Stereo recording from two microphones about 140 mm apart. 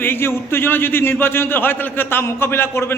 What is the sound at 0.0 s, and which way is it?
A man's voice, 15° left (ahead or behind).